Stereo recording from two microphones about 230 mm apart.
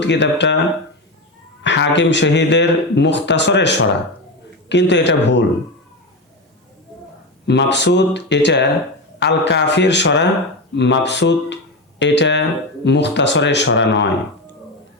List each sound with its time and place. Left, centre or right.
0.0 s speech: left
1.6 s speech: left
7.4 s speech: left